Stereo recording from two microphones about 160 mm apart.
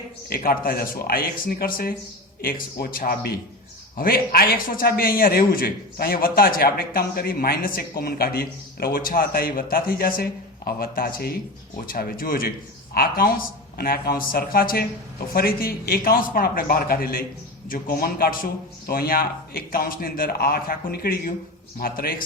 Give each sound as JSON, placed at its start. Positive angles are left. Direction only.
{"t": 0.3, "sound": "a man's voice", "side_deg": 65}